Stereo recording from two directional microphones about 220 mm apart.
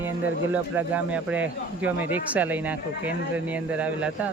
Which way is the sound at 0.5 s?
5° right (ahead or behind).